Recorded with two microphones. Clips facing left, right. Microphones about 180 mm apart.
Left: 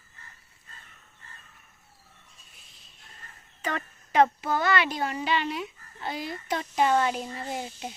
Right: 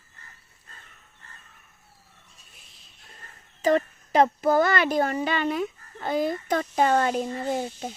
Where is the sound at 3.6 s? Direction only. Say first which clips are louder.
Right 11 dB; 35° right (ahead or behind).